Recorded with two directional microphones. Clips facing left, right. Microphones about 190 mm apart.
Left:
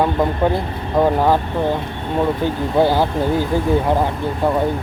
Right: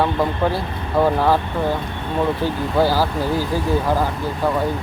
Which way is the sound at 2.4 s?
20° left (ahead or behind).